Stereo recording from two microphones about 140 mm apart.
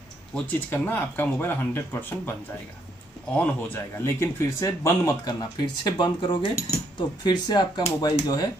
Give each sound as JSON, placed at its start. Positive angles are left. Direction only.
{"t": 0.5, "sound": "speech", "side_deg": 15}
{"t": 3.3, "sound": "speech", "side_deg": 15}